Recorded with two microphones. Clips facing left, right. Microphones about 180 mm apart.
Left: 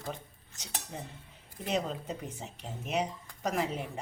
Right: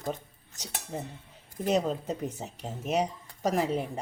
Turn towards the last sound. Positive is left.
turn(degrees=-40)  # may be behind; listen again after turning